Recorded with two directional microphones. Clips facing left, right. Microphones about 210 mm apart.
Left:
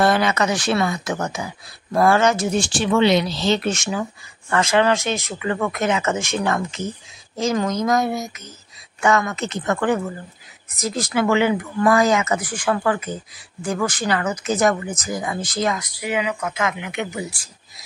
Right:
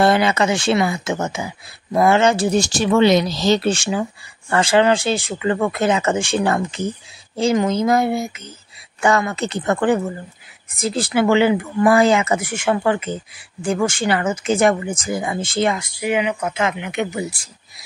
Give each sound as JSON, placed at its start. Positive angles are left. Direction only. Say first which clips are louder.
{"t": 0.0, "sound": "speech", "louder": "right 2 dB", "side_deg": -30}